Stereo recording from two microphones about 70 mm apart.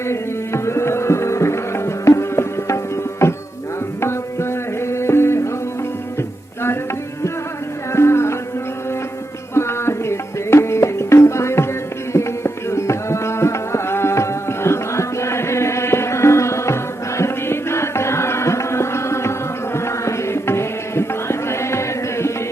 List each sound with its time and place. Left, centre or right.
0.1 s music: left
4.0 s tabla: left
7.9 s music: left
9.6 s music: left
12.1 s carnatic music: left